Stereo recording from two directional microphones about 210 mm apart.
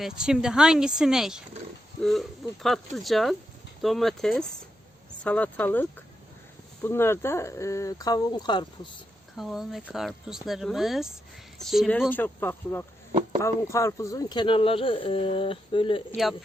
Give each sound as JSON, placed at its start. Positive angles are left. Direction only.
{"t": 0.0, "sound": "speech", "side_deg": -5}
{"t": 9.3, "sound": "speech", "side_deg": 0}
{"t": 12.1, "sound": "speech", "side_deg": 10}